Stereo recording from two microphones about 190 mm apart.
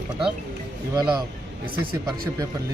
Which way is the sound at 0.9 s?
20° right (ahead or behind).